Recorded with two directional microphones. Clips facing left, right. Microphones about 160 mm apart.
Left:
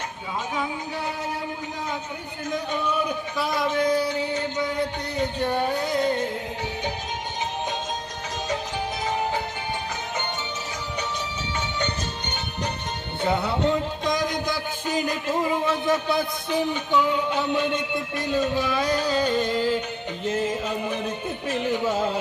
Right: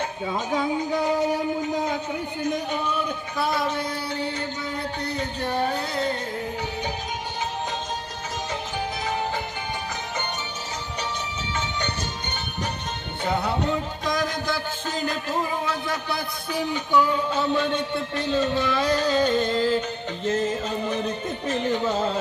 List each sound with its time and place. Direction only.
3.3 s music: 15° left (ahead or behind)
5.5 s music: 15° left (ahead or behind)
14.0 s music: 20° left (ahead or behind)